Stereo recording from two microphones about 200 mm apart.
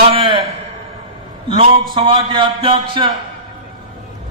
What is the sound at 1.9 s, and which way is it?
A man's voice, 25° right (ahead or behind).